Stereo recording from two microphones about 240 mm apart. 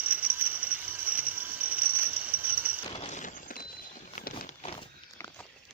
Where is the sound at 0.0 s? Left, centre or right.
Centre.